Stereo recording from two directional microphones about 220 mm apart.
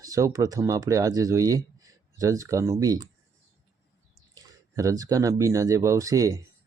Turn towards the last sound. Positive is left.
turn(degrees=-15)  # may be behind; listen again after turning